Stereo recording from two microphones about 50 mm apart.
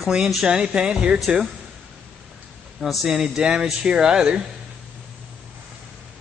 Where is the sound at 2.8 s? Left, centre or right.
Centre.